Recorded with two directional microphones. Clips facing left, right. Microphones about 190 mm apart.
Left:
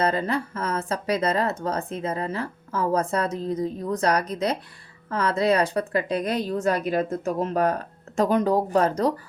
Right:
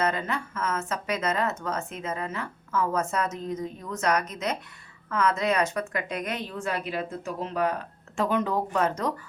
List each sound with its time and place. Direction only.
0.0 s speech: 35° left (ahead or behind)